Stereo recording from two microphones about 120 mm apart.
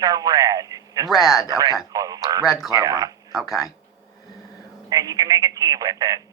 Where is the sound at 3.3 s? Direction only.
Centre (ahead or behind).